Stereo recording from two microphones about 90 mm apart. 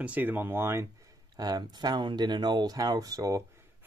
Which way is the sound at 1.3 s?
50° right (ahead or behind).